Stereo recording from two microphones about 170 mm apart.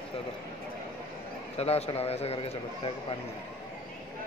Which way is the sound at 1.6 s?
35° left (ahead or behind).